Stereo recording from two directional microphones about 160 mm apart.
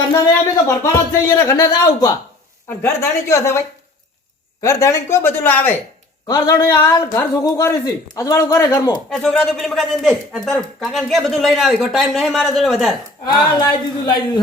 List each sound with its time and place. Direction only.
0.1 s speech: 15° left (ahead or behind)
4.6 s a man's voice: 20° left (ahead or behind)
9.0 s speech: 5° left (ahead or behind)
13.2 s a man's voice: 30° left (ahead or behind)